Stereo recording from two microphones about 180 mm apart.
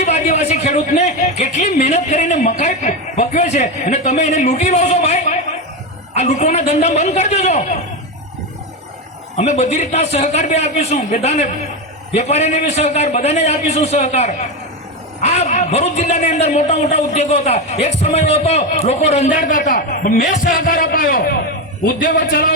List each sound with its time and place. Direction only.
0.0 s a man's voice: 40° left (ahead or behind)
9.4 s a man's voice: 40° left (ahead or behind); by 22.5 s 55° left (ahead or behind)